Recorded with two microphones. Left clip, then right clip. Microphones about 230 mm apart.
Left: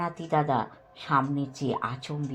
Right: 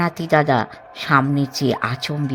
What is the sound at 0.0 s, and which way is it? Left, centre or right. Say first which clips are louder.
Speech: right 10 dB; right.